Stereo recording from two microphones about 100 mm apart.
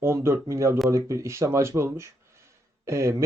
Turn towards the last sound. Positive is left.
turn(degrees=-30)  # may be behind; listen again after turning